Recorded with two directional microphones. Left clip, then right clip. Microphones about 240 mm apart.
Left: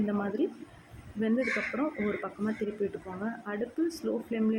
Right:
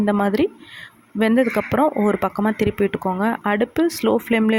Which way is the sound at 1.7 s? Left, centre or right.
Right.